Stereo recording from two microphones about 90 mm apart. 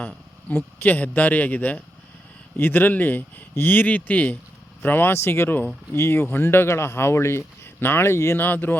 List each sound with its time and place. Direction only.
0.0 s a man's voice: 20° left (ahead or behind)